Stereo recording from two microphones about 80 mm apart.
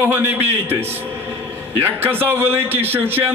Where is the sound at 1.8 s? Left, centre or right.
Right.